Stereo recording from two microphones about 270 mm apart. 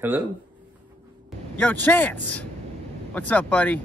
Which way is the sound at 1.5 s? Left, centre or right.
Centre.